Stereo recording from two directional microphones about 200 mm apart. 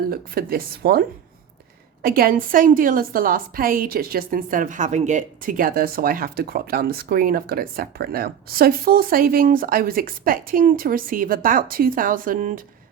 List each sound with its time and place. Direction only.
0.1 s a woman's voice: 50° right (ahead or behind)